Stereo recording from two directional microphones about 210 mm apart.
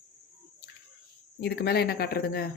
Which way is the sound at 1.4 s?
50° left (ahead or behind).